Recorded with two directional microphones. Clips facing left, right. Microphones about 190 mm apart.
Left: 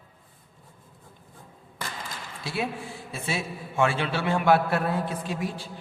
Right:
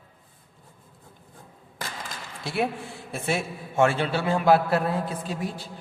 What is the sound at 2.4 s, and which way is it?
A man's voice, 55° right (ahead or behind).